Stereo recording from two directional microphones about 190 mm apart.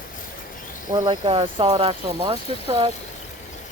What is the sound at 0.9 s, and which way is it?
Speech, 20° right (ahead or behind).